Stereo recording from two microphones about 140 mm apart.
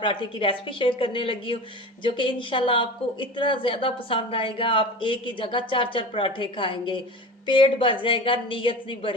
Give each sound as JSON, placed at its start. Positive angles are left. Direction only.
{"t": 0.0, "sound": "speech", "side_deg": 35}